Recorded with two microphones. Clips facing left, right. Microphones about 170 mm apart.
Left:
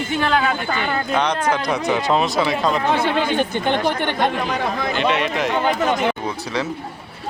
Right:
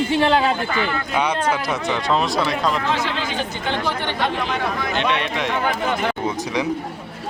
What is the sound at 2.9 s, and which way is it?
Speech, 55° left (ahead or behind).